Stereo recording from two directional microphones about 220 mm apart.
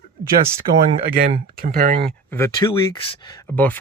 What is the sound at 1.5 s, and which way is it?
Speech, 40° right (ahead or behind).